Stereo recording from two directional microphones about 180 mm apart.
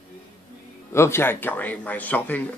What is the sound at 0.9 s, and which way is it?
Speech, 15° left (ahead or behind).